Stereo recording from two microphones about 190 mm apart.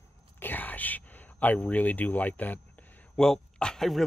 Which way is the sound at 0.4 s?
10° left (ahead or behind).